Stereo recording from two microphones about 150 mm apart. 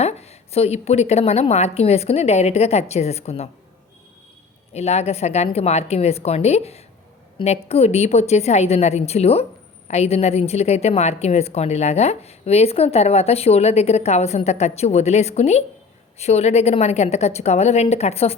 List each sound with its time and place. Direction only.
0.0 s a woman's voice: 45° left (ahead or behind)
4.7 s a woman's voice: 45° left (ahead or behind)